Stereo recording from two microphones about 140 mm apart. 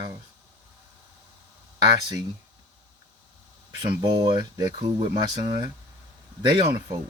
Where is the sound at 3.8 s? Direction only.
30° right (ahead or behind).